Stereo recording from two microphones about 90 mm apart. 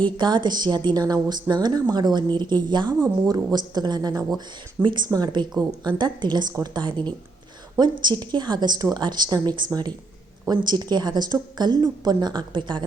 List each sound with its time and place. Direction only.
0.2 s a woman's voice: 55° right (ahead or behind)
4.4 s a woman's voice: 55° right (ahead or behind)